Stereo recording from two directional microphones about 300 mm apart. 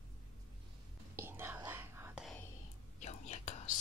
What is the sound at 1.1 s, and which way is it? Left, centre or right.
Whispering, centre.